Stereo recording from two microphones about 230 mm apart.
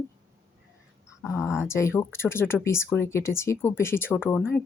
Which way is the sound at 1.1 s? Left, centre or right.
Centre.